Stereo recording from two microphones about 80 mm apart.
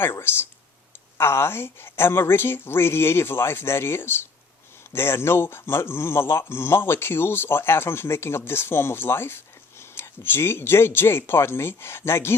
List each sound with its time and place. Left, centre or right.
0.0 s speech: left